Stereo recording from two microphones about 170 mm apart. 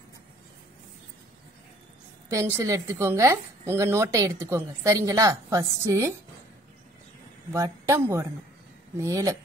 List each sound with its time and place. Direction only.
2.2 s a woman's voice: 15° right (ahead or behind)
7.5 s a woman's voice: 20° right (ahead or behind)